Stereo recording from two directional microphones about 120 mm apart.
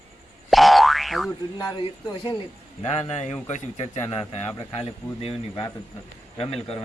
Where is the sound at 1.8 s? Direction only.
40° left (ahead or behind).